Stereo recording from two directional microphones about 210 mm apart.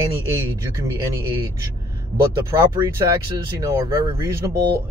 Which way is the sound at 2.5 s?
15° right (ahead or behind).